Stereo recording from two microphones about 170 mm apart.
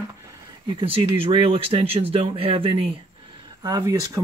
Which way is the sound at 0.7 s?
30° right (ahead or behind).